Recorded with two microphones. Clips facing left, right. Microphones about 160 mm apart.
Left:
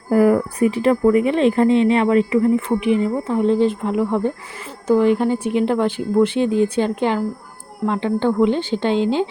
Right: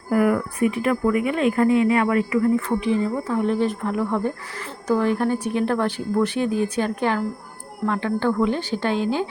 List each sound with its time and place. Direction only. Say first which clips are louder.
0.1 s speech: left 5 dB; 30° left (ahead or behind)